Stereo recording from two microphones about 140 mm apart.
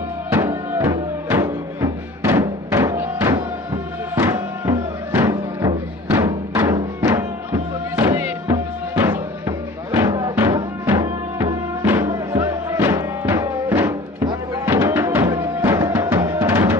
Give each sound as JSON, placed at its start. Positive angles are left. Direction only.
{"t": 0.3, "sound": "music", "side_deg": -20}